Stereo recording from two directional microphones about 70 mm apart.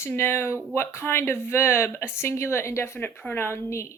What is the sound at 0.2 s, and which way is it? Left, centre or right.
Speech, left.